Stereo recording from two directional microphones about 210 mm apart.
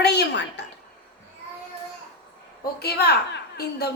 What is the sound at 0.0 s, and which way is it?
Speech, 50° left (ahead or behind).